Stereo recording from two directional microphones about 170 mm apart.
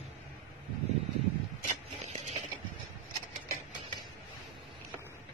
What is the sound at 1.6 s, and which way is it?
Vehicle, 45° right (ahead or behind).